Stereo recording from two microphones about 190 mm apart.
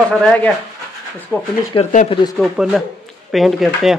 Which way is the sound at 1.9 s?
30° left (ahead or behind).